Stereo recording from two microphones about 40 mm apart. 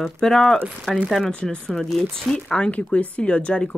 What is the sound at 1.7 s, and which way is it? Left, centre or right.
Speech, centre.